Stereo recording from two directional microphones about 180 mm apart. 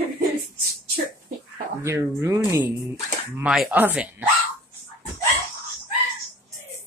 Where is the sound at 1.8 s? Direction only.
15° right (ahead or behind).